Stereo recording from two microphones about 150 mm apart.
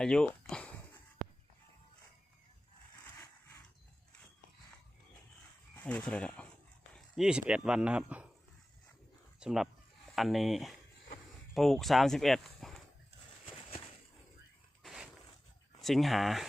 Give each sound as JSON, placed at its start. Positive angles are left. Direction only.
{"t": 0.0, "sound": "a sound", "side_deg": 5}
{"t": 5.7, "sound": "speech", "side_deg": 10}
{"t": 6.9, "sound": "speech", "side_deg": -5}
{"t": 9.4, "sound": "speech", "side_deg": 0}
{"t": 13.4, "sound": "a sound", "side_deg": 40}
{"t": 15.8, "sound": "speech", "side_deg": 0}